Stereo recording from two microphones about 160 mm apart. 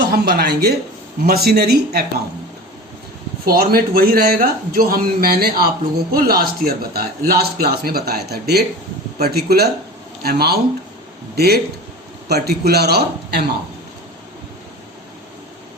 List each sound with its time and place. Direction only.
0.1 s speech: 80° right
3.4 s a man's voice: 70° right (ahead or behind); by 13.4 s 90° right